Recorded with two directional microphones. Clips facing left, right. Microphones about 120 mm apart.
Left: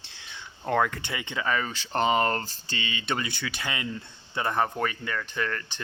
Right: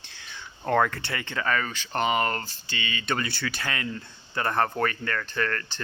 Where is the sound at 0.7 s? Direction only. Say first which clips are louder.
Right 2 dB; 10° left (ahead or behind).